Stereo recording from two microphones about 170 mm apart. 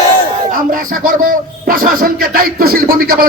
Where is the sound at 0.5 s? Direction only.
55° right (ahead or behind).